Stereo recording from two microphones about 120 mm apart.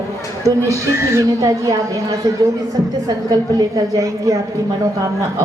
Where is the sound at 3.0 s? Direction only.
30° right (ahead or behind).